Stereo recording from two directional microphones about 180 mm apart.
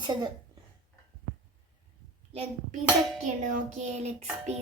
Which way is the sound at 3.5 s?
40° right (ahead or behind).